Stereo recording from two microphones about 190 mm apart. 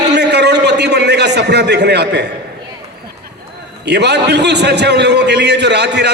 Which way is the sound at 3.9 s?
60° right (ahead or behind).